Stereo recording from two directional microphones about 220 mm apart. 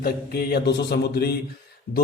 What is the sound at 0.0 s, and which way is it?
A man's voice, 45° left (ahead or behind).